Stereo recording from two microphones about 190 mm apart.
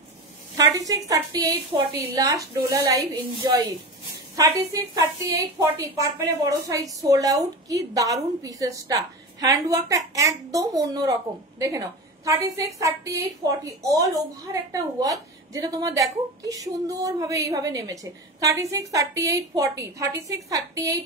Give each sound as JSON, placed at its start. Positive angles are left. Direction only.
{"t": 0.6, "sound": "a woman's voice", "side_deg": -20}